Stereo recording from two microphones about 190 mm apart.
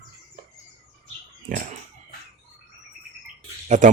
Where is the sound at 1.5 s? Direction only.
45° right (ahead or behind).